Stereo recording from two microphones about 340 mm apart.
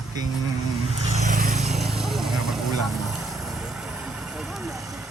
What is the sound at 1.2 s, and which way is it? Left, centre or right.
Vehicle, right.